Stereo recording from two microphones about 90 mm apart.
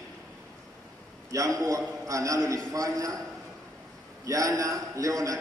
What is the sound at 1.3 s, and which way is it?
A man's voice, 40° right (ahead or behind).